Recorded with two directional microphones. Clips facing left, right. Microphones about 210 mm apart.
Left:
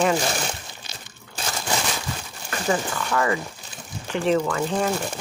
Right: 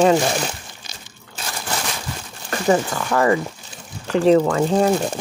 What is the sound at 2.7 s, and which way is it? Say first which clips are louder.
Speech: right 6 dB; 40° right (ahead or behind).